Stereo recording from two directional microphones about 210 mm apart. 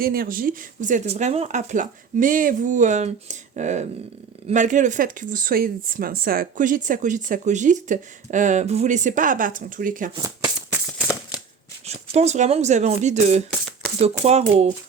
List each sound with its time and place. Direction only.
0.0 s speech: 45° right (ahead or behind)
10.2 s maraca: 15° right (ahead or behind)
11.9 s speech: 30° right (ahead or behind)